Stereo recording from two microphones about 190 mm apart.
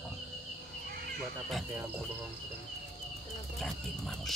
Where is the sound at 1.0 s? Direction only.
55° right (ahead or behind).